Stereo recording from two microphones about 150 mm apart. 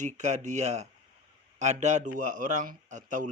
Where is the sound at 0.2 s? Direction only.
55° right (ahead or behind).